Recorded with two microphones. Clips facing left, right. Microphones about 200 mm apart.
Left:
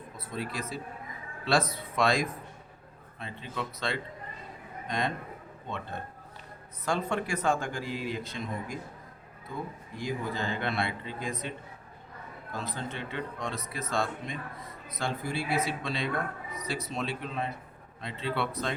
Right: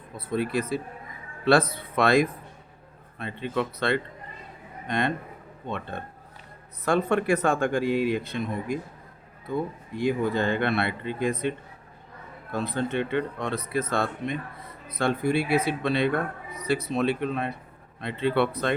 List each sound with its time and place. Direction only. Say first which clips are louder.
0.2 s speech: right 10 dB; 60° right (ahead or behind)
6.8 s speech: right 8 dB; 60° right (ahead or behind)
10.0 s speech: right 9 dB; 60° right (ahead or behind)